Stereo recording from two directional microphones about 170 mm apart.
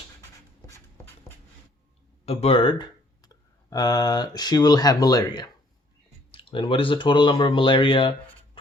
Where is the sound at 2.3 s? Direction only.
35° left (ahead or behind).